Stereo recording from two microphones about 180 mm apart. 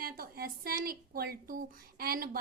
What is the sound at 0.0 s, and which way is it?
Speech, 55° right (ahead or behind).